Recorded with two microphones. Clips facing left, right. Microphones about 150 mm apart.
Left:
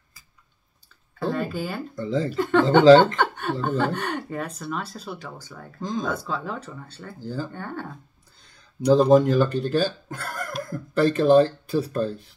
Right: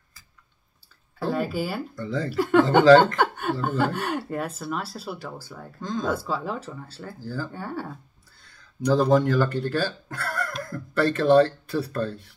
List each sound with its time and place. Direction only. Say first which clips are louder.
1.2 s speech: even; 5° right (ahead or behind)
2.0 s speech: left 6 dB; 20° left (ahead or behind)
2.3 s speech: right 3 dB; 10° right (ahead or behind)
3.2 s chuckle: right 1 dB; 5° right (ahead or behind)
3.6 s speech: left 1 dB; 5° right (ahead or behind)
5.8 s speech: left 1 dB; 20° left (ahead or behind)
6.0 s speech: right 2 dB; 10° right (ahead or behind)
7.2 s speech: left 2 dB; 20° left (ahead or behind)
7.5 s speech: right 1 dB; 5° right (ahead or behind)
8.8 s speech: left 4 dB; 20° left (ahead or behind)